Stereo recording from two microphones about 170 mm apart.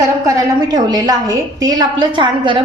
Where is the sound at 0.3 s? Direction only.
25° right (ahead or behind).